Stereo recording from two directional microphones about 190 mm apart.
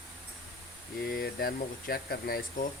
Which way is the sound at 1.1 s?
55° left (ahead or behind).